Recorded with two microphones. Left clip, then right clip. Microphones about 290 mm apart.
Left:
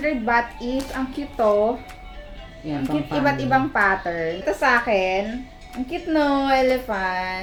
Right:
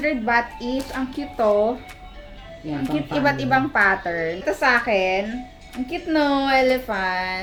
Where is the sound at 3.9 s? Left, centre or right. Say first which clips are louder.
Even; right.